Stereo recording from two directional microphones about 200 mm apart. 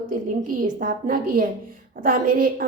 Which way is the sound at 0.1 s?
40° right (ahead or behind).